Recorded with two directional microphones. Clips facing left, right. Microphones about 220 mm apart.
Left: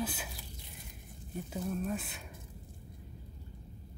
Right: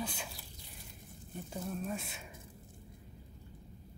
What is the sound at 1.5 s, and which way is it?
Speech, centre (ahead or behind).